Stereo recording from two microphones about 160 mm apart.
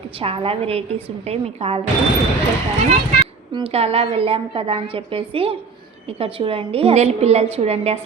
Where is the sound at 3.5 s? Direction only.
35° right (ahead or behind).